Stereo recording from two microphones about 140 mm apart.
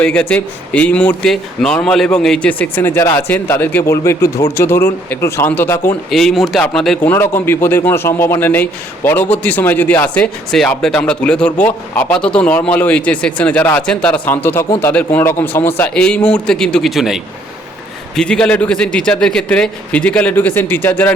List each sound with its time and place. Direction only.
0.0 s speech: 5° left (ahead or behind)
6.1 s speech: centre (ahead or behind)
7.0 s speech: 15° left (ahead or behind); by 17.2 s centre (ahead or behind)
18.2 s speech: 5° left (ahead or behind)